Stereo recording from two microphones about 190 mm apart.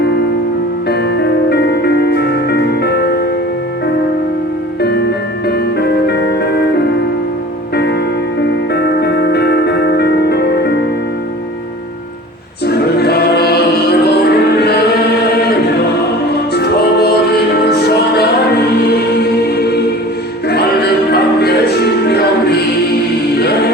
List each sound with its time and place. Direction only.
1.5 s music: 60° left (ahead or behind)
4.8 s music: 60° left (ahead or behind)
8.7 s music: 60° left (ahead or behind)
12.6 s choir: 55° left (ahead or behind)
16.3 s music: 60° left (ahead or behind)
21.1 s music: 60° left (ahead or behind)